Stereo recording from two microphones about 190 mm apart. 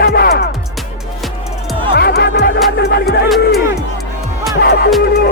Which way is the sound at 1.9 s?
55° left (ahead or behind).